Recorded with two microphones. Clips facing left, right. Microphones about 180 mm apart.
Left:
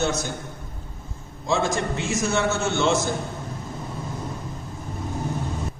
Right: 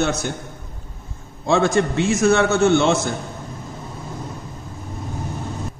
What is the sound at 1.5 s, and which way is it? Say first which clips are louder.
A man's voice: right 6 dB; 65° right (ahead or behind).